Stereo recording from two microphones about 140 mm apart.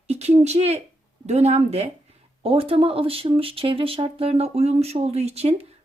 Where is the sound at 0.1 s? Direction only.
50° right (ahead or behind).